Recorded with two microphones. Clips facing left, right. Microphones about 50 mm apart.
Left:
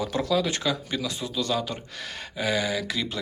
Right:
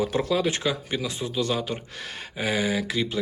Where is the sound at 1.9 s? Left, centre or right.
Centre.